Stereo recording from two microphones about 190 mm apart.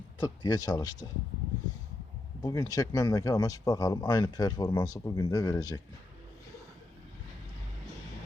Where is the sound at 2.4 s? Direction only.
20° left (ahead or behind).